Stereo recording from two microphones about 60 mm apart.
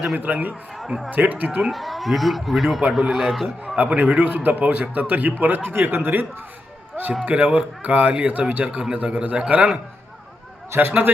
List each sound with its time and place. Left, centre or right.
0.2 s a man's voice: right
1.6 s speech: centre
3.8 s a man's voice: right
7.3 s a man's voice: right
10.8 s a man's voice: right